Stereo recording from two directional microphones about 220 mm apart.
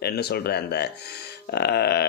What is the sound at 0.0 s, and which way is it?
A man's voice, 45° left (ahead or behind).